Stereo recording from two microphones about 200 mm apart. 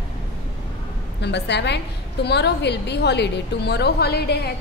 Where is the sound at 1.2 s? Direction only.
60° left (ahead or behind).